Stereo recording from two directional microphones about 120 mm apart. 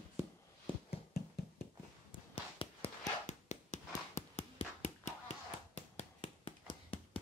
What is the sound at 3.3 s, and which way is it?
Hands, 80° left.